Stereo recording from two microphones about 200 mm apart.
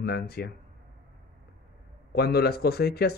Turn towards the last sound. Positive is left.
turn(degrees=50)  # may be behind; listen again after turning